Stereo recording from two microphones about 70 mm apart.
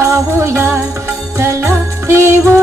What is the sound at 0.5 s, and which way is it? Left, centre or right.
Music, right.